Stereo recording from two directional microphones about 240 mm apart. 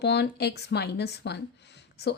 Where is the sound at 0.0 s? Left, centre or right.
Left.